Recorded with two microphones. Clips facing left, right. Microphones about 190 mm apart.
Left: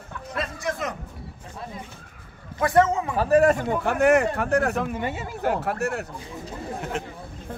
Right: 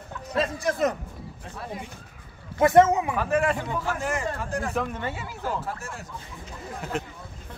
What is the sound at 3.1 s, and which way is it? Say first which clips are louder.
Speech: left 6 dB; 35° left (ahead or behind).